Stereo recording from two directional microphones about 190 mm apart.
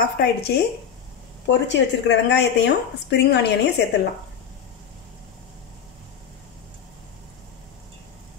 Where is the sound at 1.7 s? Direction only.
65° left (ahead or behind).